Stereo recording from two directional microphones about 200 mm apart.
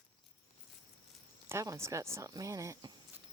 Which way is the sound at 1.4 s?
15° right (ahead or behind).